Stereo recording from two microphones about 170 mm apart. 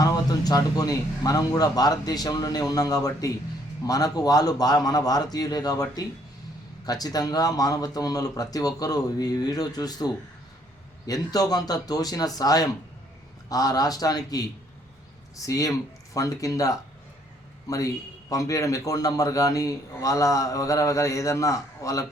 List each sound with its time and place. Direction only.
0.0 s a man's voice: 20° left (ahead or behind)